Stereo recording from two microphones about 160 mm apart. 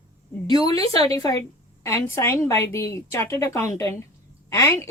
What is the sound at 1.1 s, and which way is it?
A woman's voice, 25° left (ahead or behind).